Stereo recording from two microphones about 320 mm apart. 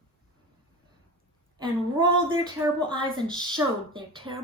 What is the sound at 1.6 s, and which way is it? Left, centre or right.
A woman's voice, centre.